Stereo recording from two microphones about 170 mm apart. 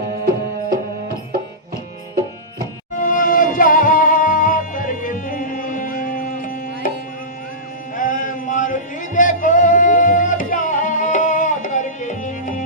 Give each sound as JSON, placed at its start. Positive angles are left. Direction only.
{"t": 3.0, "sound": "music", "side_deg": 55}
{"t": 7.9, "sound": "music", "side_deg": 50}